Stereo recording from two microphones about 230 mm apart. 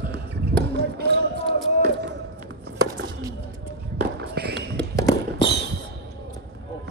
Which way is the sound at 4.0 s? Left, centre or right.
Right.